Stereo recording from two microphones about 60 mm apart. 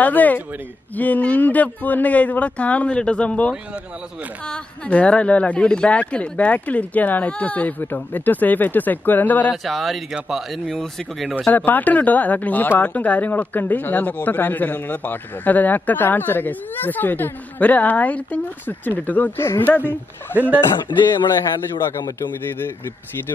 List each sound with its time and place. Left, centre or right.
0.0 s speech: left
9.5 s speech: centre
11.5 s speech: left
19.9 s speech: right